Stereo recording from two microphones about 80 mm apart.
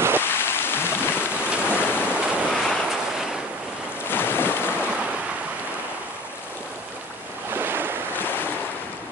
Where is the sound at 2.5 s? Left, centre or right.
Centre.